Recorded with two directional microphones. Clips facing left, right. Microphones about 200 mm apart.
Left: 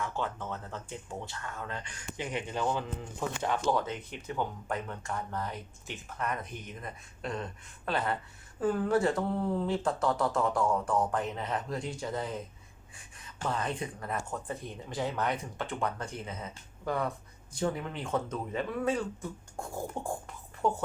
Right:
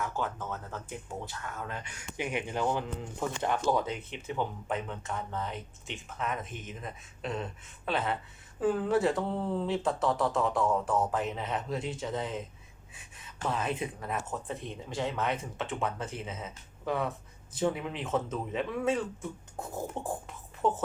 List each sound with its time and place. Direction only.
0.0 s speech: 5° right (ahead or behind)
4.4 s speech: centre (ahead or behind)